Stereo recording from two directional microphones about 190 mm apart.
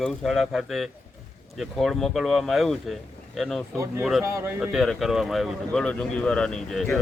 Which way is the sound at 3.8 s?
15° right (ahead or behind).